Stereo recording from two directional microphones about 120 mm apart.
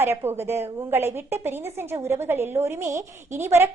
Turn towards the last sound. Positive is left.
turn(degrees=-20)  # may be behind; listen again after turning